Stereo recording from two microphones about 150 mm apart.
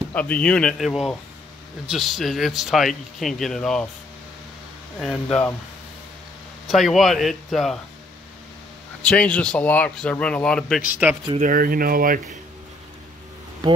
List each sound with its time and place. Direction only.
0.1 s speech: 10° left (ahead or behind)
4.9 s speech: 5° left (ahead or behind)
6.7 s speech: centre (ahead or behind)
9.0 s speech: 10° left (ahead or behind)
11.3 s speech: 65° right (ahead or behind)
13.6 s speech: 25° right (ahead or behind)